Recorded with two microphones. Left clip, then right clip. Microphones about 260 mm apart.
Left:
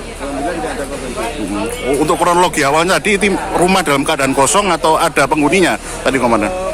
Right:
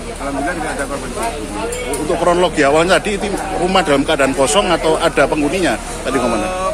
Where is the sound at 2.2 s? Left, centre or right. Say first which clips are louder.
Right 1 dB; left.